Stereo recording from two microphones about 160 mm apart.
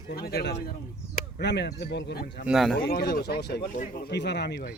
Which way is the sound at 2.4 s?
Centre (ahead or behind).